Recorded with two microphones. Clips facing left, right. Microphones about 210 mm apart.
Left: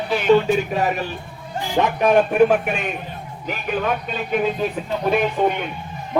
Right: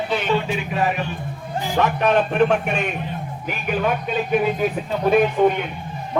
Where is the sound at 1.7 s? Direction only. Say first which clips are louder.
Left 2 dB; 15° left (ahead or behind).